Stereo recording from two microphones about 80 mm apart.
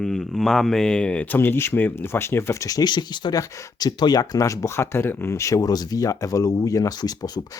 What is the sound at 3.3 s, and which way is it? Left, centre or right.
Speech, left.